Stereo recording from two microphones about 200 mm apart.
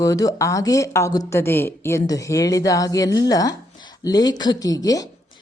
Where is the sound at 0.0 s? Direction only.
15° left (ahead or behind).